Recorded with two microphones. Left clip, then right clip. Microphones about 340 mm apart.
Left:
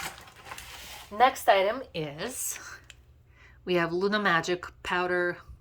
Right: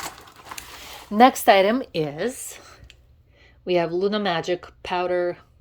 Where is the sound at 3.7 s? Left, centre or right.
Centre.